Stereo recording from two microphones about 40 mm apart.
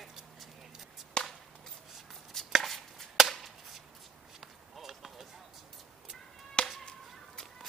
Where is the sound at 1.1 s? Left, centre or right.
Left.